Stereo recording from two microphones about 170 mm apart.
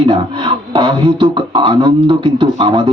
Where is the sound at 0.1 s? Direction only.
30° right (ahead or behind).